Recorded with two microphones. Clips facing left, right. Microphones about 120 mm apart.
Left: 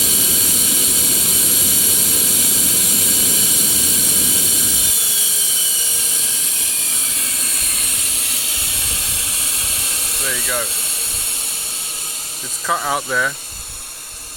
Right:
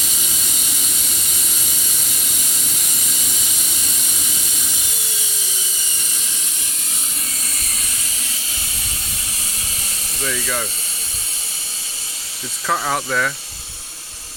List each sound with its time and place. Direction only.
8.7 s a sound: 75° left (ahead or behind)
10.2 s speech: centre (ahead or behind)
12.6 s speech: 5° left (ahead or behind)